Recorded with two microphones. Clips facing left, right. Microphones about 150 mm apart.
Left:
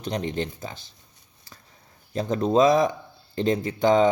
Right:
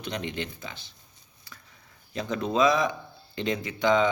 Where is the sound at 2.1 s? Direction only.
40° left (ahead or behind).